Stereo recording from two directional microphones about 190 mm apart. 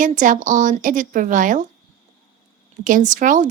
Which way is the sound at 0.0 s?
45° right (ahead or behind).